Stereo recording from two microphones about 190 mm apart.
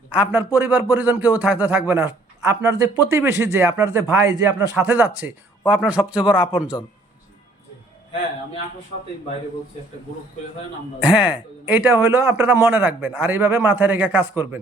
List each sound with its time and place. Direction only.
0.1 s a man's voice: 5° right (ahead or behind)
4.7 s speech: 10° right (ahead or behind)
11.3 s a man's voice: 5° right (ahead or behind)